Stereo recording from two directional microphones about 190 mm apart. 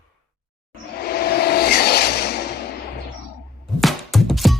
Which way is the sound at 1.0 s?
55° left (ahead or behind).